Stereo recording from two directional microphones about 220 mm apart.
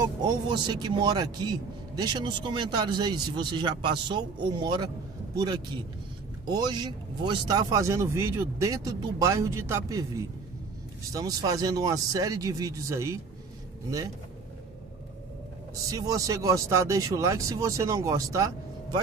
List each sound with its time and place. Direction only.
0.2 s a man's voice: 20° right (ahead or behind)
15.9 s speech: 15° right (ahead or behind)